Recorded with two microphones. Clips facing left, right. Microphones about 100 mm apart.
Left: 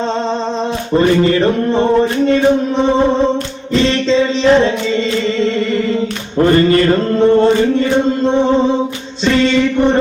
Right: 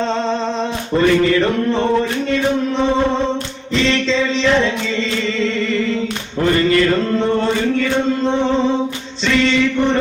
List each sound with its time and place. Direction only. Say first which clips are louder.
0.9 s chant: left 2 dB; 30° left (ahead or behind)
3.8 s music: left 4 dB; 40° left (ahead or behind)
6.4 s chant: left 4 dB; 40° left (ahead or behind)
9.2 s chant: left 3 dB; 40° left (ahead or behind)